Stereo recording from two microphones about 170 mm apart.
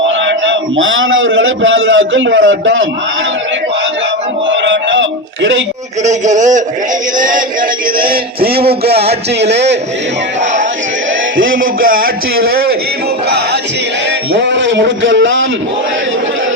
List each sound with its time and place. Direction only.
0.3 s a sound: 90° right
1.3 s a man's voice: 90° right
4.4 s a sound: 90° right
6.0 s speech: 45° right (ahead or behind)
9.4 s a man's voice: 90° right
11.6 s speech: 55° right (ahead or behind)
14.3 s a man's voice: 90° right